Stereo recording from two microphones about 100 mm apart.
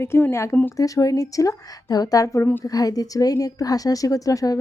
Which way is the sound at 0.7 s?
35° left (ahead or behind).